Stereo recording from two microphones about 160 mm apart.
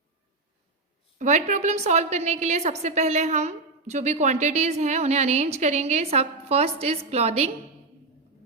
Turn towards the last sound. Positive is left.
turn(degrees=-40)  # may be behind; listen again after turning